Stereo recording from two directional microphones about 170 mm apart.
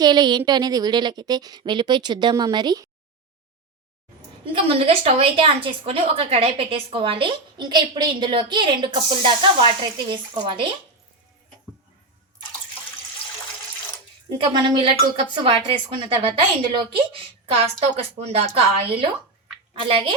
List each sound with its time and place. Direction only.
0.0 s a woman's voice: 25° right (ahead or behind)
4.5 s a woman's voice: 35° right (ahead or behind)
14.3 s a woman's voice: 30° right (ahead or behind)